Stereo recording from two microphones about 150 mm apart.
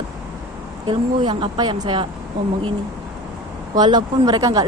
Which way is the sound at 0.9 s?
30° right (ahead or behind).